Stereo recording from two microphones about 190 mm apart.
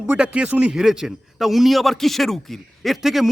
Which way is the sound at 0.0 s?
5° right (ahead or behind).